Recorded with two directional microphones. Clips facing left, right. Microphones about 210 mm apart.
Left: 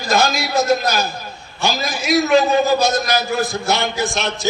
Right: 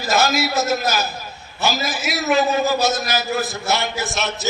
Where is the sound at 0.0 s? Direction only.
5° right (ahead or behind).